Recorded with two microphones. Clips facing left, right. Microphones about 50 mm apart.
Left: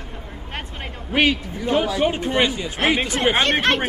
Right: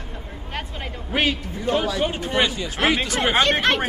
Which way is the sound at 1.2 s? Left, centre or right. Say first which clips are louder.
Left 4 dB; left.